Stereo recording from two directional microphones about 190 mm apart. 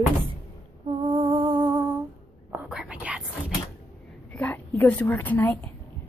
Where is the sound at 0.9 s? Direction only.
25° right (ahead or behind).